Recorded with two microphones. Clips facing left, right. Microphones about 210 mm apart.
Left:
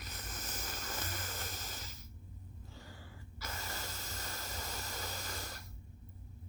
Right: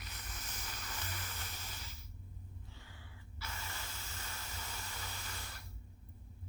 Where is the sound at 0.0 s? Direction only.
45° left (ahead or behind).